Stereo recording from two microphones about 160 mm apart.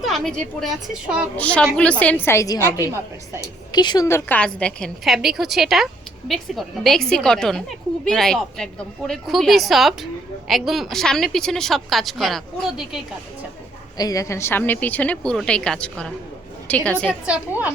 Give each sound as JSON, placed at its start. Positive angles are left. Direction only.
{"t": 0.0, "sound": "a woman's voice", "side_deg": 5}
{"t": 2.8, "sound": "a woman's voice", "side_deg": -15}
{"t": 3.7, "sound": "a woman's voice", "side_deg": 25}
{"t": 14.0, "sound": "a woman's voice", "side_deg": 20}
{"t": 17.1, "sound": "a woman's voice", "side_deg": -5}